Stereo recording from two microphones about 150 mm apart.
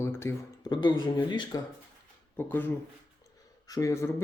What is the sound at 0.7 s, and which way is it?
Speech, 30° left (ahead or behind).